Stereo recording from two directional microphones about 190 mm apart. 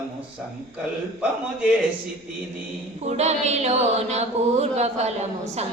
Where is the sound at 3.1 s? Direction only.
35° right (ahead or behind).